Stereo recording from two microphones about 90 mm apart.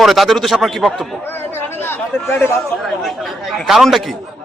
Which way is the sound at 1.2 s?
25° left (ahead or behind).